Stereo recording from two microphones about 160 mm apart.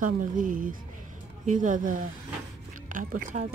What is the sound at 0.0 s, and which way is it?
A woman's voice, 55° right (ahead or behind).